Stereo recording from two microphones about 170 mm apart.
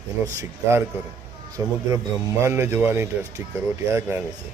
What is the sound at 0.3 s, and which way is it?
Speech, 15° right (ahead or behind).